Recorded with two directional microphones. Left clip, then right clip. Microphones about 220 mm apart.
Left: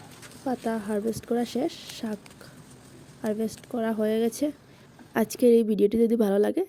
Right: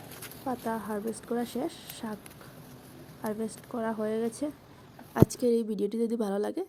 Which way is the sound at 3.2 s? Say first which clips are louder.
Left 5 dB; 30° left (ahead or behind).